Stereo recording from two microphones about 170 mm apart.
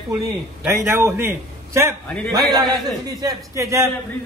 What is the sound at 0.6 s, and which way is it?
A man's voice, 15° right (ahead or behind).